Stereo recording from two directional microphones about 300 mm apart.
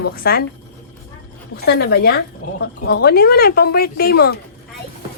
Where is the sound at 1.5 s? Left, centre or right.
Left.